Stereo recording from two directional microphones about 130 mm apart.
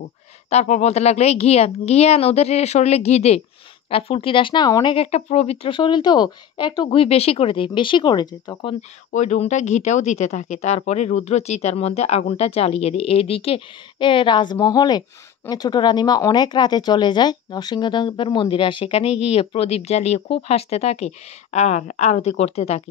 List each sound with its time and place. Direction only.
0.5 s speech: 60° left (ahead or behind)
3.9 s speech: 45° left (ahead or behind)
4.9 s speech: 55° left (ahead or behind); by 7.0 s 35° left (ahead or behind)
7.0 s speech: 50° left (ahead or behind); by 8.7 s 35° left (ahead or behind)
9.1 s speech: 65° left (ahead or behind)